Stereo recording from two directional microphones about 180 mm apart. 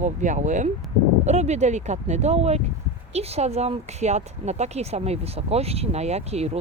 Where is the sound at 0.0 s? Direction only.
40° right (ahead or behind).